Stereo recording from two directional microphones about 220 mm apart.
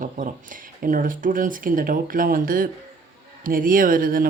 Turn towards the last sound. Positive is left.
turn(degrees=-40)  # may be behind; listen again after turning